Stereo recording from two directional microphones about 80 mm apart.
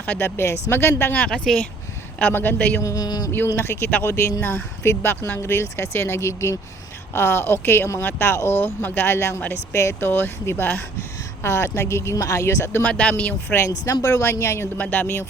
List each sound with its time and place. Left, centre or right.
0.0 s speech: left
1.1 s speech: centre
2.8 s a sound: left
3.3 s speech: left
12.8 s speech: centre
13.7 s speech: left
14.8 s speech: left